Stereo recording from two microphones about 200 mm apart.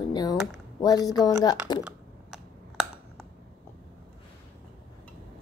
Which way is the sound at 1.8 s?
Centre (ahead or behind).